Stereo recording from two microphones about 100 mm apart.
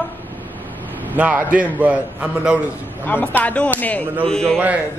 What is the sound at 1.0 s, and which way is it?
A man's voice, 15° right (ahead or behind).